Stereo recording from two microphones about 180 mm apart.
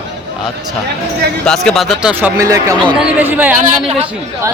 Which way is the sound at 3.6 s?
35° right (ahead or behind).